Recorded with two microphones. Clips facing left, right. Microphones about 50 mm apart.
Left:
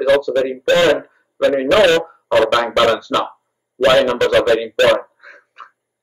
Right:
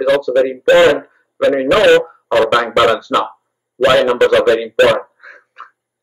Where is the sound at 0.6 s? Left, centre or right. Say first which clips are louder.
Right 5 dB; centre.